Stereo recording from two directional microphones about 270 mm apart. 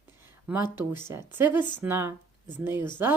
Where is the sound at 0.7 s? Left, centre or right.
Centre.